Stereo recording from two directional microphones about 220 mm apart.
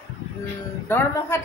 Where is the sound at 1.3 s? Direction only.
10° left (ahead or behind).